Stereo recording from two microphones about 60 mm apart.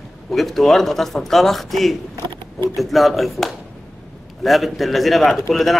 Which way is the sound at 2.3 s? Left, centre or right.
Left.